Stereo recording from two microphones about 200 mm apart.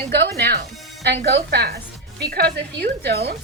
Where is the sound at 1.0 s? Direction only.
55° right (ahead or behind).